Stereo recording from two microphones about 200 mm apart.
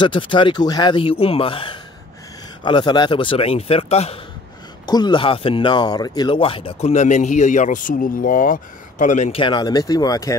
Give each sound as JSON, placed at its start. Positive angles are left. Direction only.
{"t": 0.0, "sound": "a man's voice", "side_deg": 25}
{"t": 9.4, "sound": "a man's voice", "side_deg": 20}